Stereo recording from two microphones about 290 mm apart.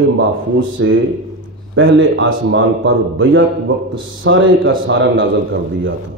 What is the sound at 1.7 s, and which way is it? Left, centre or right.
A man's voice, right.